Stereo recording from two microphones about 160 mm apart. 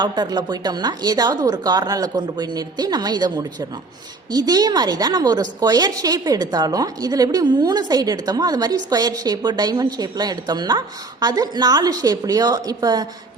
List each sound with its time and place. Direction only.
0.0 s a woman's voice: 25° right (ahead or behind)